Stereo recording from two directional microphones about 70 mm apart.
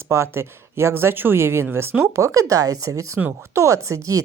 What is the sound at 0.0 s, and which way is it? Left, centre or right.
Speech, right.